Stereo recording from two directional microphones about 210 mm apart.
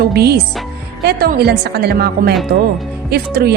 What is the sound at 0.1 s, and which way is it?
A woman's voice, 50° right (ahead or behind).